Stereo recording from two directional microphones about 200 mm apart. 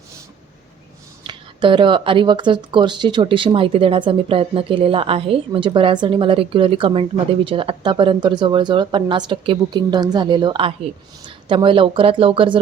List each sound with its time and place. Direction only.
1.2 s speech: 25° right (ahead or behind)